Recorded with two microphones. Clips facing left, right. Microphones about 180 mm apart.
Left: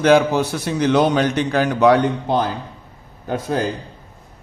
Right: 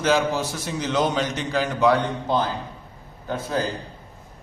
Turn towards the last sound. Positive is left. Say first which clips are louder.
# left 4 dB
turn(degrees=70)  # may be behind; listen again after turning